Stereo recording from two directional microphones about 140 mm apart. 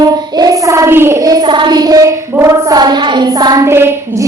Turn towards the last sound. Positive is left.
turn(degrees=-15)  # may be behind; listen again after turning